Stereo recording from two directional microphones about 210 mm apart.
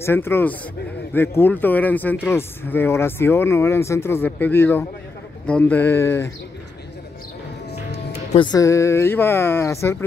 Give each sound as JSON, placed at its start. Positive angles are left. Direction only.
{"t": 0.0, "sound": "speech", "side_deg": 10}
{"t": 8.1, "sound": "music", "side_deg": 30}
{"t": 8.5, "sound": "speech", "side_deg": 15}